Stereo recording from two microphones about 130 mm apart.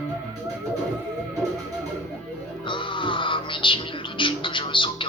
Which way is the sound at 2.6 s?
40° left (ahead or behind).